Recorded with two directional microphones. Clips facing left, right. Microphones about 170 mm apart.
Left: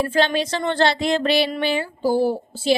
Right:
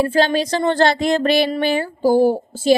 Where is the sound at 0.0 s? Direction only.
35° right (ahead or behind).